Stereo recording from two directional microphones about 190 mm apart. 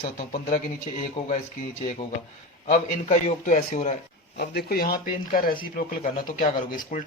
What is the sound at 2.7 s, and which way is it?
A man's voice, 40° left (ahead or behind).